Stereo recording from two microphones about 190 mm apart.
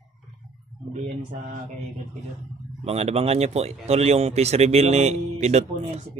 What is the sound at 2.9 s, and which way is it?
Speech, 35° right (ahead or behind).